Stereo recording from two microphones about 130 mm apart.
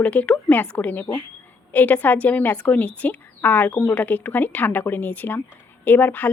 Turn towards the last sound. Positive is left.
turn(degrees=15)  # may be behind; listen again after turning